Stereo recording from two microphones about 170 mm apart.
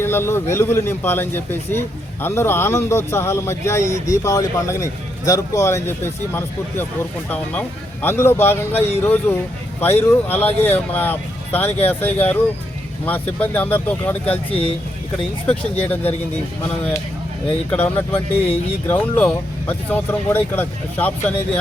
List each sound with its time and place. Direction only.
0.0 s a man's voice: 15° left (ahead or behind)
8.0 s a man's voice: 15° left (ahead or behind)
17.7 s a man's voice: 10° left (ahead or behind)